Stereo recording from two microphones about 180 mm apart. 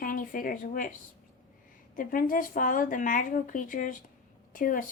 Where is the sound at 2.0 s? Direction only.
50° left (ahead or behind).